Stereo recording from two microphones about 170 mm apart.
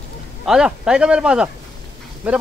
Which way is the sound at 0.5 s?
5° right (ahead or behind).